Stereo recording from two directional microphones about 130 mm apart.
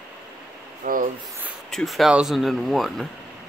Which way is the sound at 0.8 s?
90° right.